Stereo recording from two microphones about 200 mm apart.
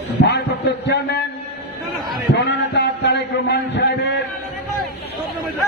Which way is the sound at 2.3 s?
55° left (ahead or behind).